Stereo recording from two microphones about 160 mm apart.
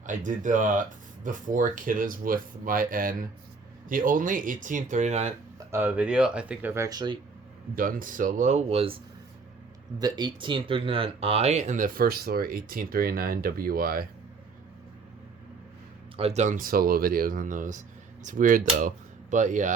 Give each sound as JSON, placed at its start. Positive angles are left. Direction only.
{"t": 0.0, "sound": "speech", "side_deg": -55}
{"t": 5.7, "sound": "speech", "side_deg": -10}
{"t": 7.8, "sound": "speech", "side_deg": -60}
{"t": 10.0, "sound": "speech", "side_deg": -25}
{"t": 16.1, "sound": "speech", "side_deg": -40}